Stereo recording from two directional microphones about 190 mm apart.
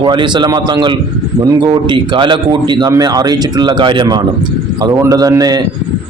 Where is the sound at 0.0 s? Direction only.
25° right (ahead or behind).